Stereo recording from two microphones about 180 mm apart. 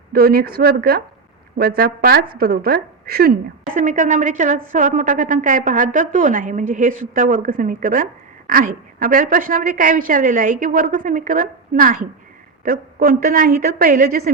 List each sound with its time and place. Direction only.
0.1 s a woman's voice: 60° right (ahead or behind)
3.8 s a woman's voice: 45° right (ahead or behind)